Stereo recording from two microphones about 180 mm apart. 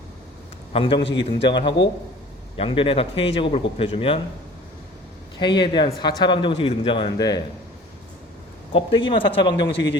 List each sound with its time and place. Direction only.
0.7 s a man's voice: 30° left (ahead or behind)
5.4 s a man's voice: 25° left (ahead or behind)
8.7 s a man's voice: 25° left (ahead or behind)